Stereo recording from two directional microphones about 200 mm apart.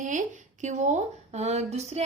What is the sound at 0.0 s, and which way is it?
A woman's voice, 40° right (ahead or behind).